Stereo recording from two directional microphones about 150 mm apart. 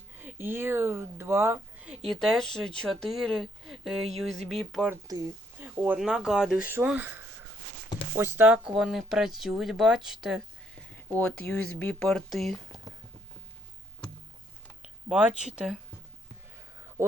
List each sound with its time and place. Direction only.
0.1 s speech: 15° right (ahead or behind)
2.0 s speech: centre (ahead or behind)
5.0 s speech: 20° right (ahead or behind); by 10.4 s 5° right (ahead or behind)
11.2 s speech: 10° left (ahead or behind)
15.1 s speech: 5° right (ahead or behind)
16.7 s a sound: 15° right (ahead or behind)